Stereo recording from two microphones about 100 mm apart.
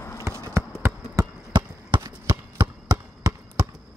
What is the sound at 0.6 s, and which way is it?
Basketball bounce, 25° right (ahead or behind).